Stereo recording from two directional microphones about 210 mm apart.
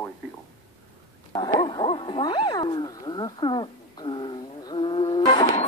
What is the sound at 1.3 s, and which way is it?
Dog, 20° left (ahead or behind).